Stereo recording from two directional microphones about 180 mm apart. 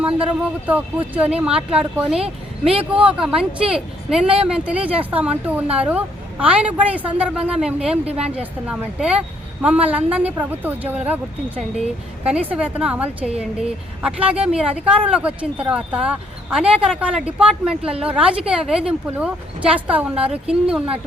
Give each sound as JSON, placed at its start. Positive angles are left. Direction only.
{"t": 0.3, "sound": "speech", "side_deg": -10}
{"t": 2.7, "sound": "speech", "side_deg": -30}
{"t": 3.1, "sound": "speech", "side_deg": -5}